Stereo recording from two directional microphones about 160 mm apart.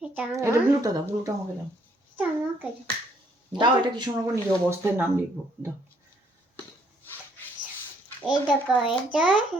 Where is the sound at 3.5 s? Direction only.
30° right (ahead or behind).